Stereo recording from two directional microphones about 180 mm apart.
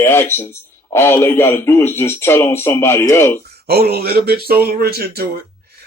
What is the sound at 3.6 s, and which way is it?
Speech, 60° right (ahead or behind).